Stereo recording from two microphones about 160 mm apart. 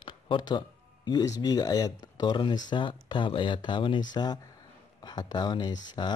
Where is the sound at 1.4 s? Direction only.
25° left (ahead or behind).